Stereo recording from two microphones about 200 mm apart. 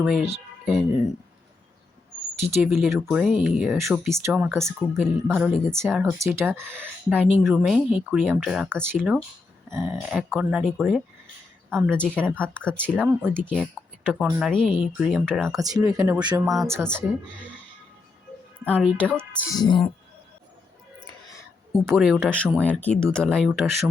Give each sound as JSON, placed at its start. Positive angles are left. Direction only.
{"t": 0.0, "sound": "speech", "side_deg": 0}
{"t": 2.6, "sound": "speech", "side_deg": -5}
{"t": 6.1, "sound": "speech", "side_deg": -15}
{"t": 9.6, "sound": "speech", "side_deg": -15}
{"t": 9.9, "sound": "speech", "side_deg": 0}
{"t": 13.0, "sound": "speech", "side_deg": -5}
{"t": 13.5, "sound": "speech", "side_deg": 5}
{"t": 15.4, "sound": "speech", "side_deg": -15}
{"t": 18.6, "sound": "speech", "side_deg": 5}
{"t": 19.5, "sound": "music", "side_deg": 20}
{"t": 21.8, "sound": "speech", "side_deg": 0}
{"t": 23.5, "sound": "speech", "side_deg": -10}